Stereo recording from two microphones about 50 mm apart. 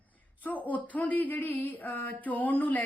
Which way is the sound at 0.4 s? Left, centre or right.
Left.